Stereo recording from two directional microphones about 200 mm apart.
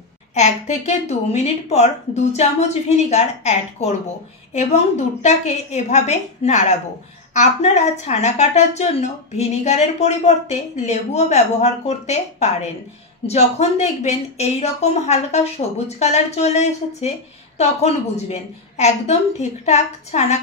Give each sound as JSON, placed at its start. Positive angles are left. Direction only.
{"t": 0.3, "sound": "a woman's voice", "side_deg": 35}